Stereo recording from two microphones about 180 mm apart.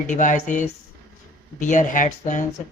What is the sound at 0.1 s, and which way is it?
Speech, 45° left (ahead or behind).